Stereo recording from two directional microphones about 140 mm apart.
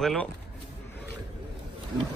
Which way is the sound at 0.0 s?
5° left (ahead or behind).